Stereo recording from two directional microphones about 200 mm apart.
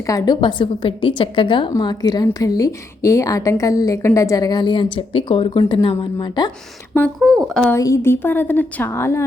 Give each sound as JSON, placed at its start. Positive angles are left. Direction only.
{"t": 0.0, "sound": "a woman's voice", "side_deg": 15}
{"t": 7.2, "sound": "a woman's voice", "side_deg": 0}